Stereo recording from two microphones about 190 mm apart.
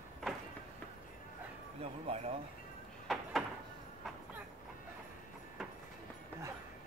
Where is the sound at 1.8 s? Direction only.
35° right (ahead or behind).